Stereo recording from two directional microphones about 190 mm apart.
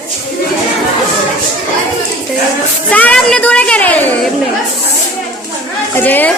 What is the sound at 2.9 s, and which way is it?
Music, 5° left (ahead or behind).